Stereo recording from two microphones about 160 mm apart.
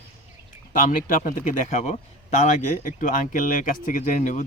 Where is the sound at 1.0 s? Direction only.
50° left (ahead or behind).